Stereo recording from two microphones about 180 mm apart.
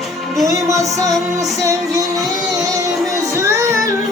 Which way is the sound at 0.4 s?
15° right (ahead or behind).